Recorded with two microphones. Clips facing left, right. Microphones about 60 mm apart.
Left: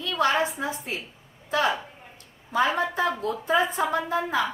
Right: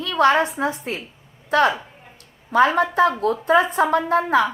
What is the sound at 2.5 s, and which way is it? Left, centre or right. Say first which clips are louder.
A woman's voice: right 7 dB; right.